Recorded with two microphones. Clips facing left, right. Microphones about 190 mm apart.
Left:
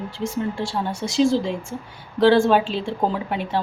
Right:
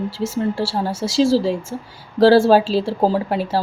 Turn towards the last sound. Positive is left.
turn(degrees=-35)  # may be behind; listen again after turning